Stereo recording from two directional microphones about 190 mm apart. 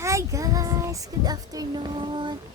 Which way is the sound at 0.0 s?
15° right (ahead or behind).